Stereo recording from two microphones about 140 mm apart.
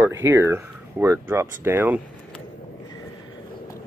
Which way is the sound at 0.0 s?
20° right (ahead or behind).